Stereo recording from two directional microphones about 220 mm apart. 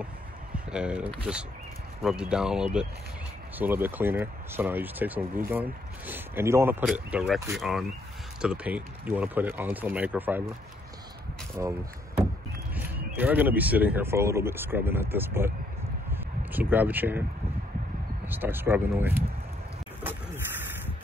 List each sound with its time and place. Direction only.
0.7 s speech: 5° right (ahead or behind)
11.6 s speech: 10° right (ahead or behind)
12.7 s speech: 10° right (ahead or behind)
16.5 s speech: 10° right (ahead or behind)
18.2 s speech: 10° right (ahead or behind)